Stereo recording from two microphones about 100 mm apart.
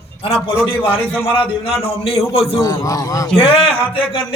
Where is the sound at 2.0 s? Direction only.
75° left (ahead or behind).